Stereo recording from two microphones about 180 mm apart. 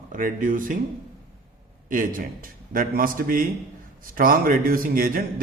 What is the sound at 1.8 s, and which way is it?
A man's voice, 50° right (ahead or behind).